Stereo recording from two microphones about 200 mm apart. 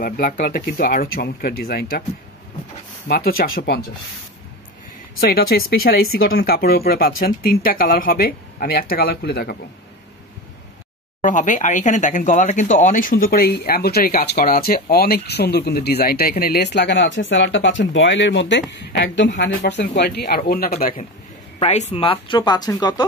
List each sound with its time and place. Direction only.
0.0 s speech: 45° left (ahead or behind)
3.1 s speech: 50° left (ahead or behind)
5.2 s speech: 50° left (ahead or behind)
11.1 s speech: 40° left (ahead or behind)
21.5 s speech: 35° left (ahead or behind)